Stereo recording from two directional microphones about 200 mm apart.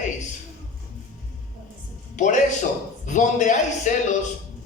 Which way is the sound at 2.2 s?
40° left (ahead or behind).